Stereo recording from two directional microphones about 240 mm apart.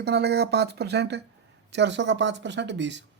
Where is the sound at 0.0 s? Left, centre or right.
Right.